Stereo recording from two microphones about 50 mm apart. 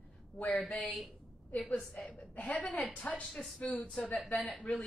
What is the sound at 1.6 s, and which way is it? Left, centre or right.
Speech, left.